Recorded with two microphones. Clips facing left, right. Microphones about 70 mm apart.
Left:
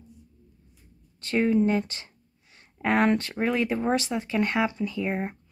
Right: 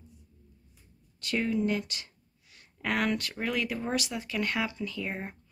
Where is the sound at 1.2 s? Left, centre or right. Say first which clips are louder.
Left 6 dB; left.